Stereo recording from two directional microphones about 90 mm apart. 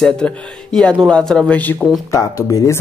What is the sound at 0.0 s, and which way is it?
Speech, 5° left (ahead or behind).